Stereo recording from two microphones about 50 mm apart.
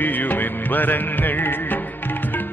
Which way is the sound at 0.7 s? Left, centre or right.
Left.